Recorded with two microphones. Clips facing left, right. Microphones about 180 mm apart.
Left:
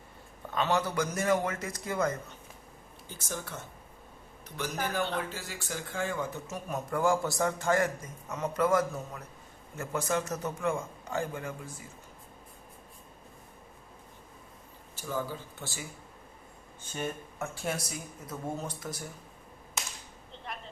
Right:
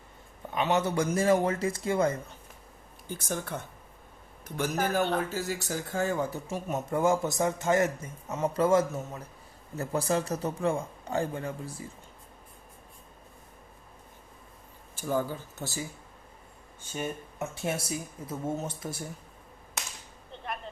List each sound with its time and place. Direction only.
0.5 s a man's voice: 20° right (ahead or behind)
3.1 s speech: 55° right (ahead or behind); by 6.6 s 35° right (ahead or behind)
6.7 s a man's voice: 20° right (ahead or behind)
15.1 s speech: 40° right (ahead or behind)
17.4 s a man's voice: 20° right (ahead or behind)